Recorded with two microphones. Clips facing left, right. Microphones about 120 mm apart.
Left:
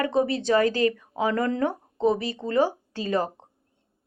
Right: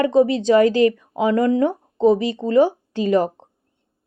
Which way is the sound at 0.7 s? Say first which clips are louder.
Right 7 dB; 40° left (ahead or behind).